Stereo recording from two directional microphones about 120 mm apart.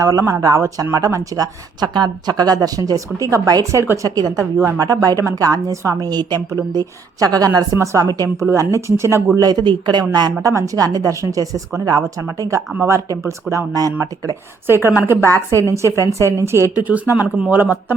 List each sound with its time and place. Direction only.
0.0 s speech: 30° right (ahead or behind)
13.5 s speech: 30° right (ahead or behind)
14.9 s speech: 20° right (ahead or behind)